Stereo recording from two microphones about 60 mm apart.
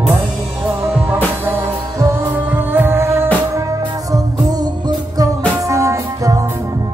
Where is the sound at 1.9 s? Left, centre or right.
Right.